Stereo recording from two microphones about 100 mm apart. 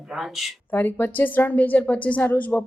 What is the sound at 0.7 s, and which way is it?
A woman's voice, 20° left (ahead or behind).